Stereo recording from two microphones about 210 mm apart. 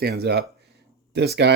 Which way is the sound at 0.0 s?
50° right (ahead or behind).